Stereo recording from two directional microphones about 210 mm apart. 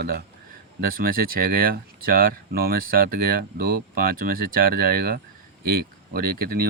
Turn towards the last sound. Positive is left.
turn(degrees=-45)  # may be behind; listen again after turning